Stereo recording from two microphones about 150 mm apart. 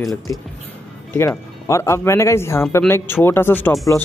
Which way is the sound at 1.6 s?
20° left (ahead or behind).